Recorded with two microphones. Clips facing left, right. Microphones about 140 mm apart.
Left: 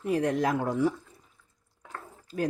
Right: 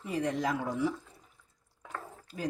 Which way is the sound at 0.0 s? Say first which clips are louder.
Left 5 dB; 65° left (ahead or behind).